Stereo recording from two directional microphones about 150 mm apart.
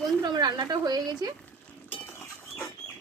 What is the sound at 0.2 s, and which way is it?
Speech, 25° right (ahead or behind).